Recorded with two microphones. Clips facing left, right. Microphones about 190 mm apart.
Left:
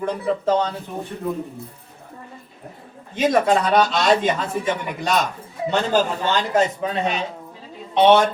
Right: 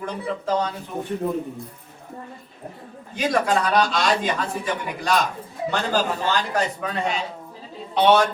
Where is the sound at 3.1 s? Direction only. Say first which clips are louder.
Left 4 dB; 25° left (ahead or behind).